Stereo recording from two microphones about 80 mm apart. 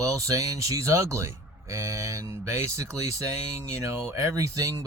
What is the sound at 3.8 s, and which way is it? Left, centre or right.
Speech, right.